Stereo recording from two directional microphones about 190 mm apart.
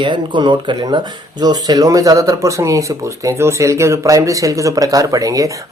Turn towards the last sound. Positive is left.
turn(degrees=-15)  # may be behind; listen again after turning